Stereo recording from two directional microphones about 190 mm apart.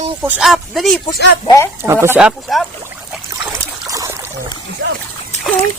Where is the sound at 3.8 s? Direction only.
15° right (ahead or behind).